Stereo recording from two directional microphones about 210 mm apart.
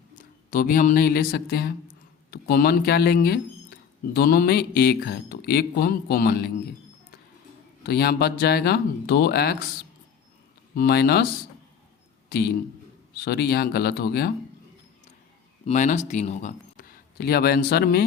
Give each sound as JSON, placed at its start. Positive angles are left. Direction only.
{"t": 0.2, "sound": "speech", "side_deg": 40}
{"t": 7.9, "sound": "speech", "side_deg": 50}
{"t": 10.8, "sound": "speech", "side_deg": 50}
{"t": 12.3, "sound": "speech", "side_deg": 50}
{"t": 15.6, "sound": "speech", "side_deg": 35}